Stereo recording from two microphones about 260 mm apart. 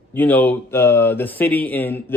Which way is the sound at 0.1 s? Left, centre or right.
Centre.